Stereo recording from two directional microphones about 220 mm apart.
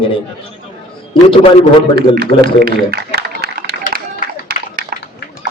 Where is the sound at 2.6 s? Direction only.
45° right (ahead or behind).